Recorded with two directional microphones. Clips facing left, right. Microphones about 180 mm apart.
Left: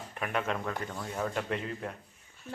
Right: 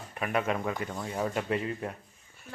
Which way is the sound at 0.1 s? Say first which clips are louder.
Right 3 dB; 5° right (ahead or behind).